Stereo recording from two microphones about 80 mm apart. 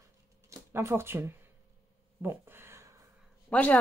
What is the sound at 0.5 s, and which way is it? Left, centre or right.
Speech, right.